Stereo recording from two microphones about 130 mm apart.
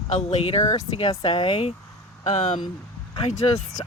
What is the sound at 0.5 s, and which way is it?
Speech, 30° left (ahead or behind).